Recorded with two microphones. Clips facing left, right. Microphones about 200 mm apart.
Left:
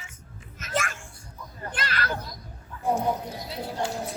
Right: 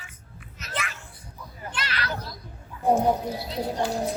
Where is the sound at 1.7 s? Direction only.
50° left (ahead or behind).